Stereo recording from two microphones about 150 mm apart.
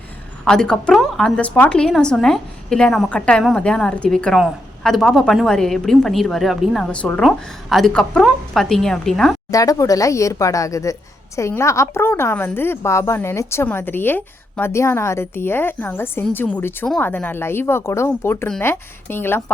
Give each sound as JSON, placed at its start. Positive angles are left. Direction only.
{"t": 0.4, "sound": "a woman's voice", "side_deg": 5}
{"t": 9.5, "sound": "a woman's voice", "side_deg": 25}